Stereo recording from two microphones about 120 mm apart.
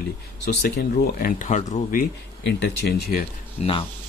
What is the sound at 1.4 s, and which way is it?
Speech, 75° left (ahead or behind).